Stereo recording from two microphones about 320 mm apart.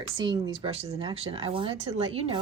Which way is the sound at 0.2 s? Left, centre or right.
Centre.